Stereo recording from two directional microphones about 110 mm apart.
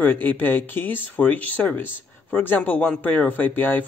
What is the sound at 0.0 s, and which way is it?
Speech, 15° left (ahead or behind).